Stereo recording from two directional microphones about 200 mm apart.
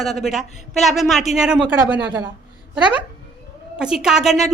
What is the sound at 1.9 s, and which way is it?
Speech, 60° right (ahead or behind).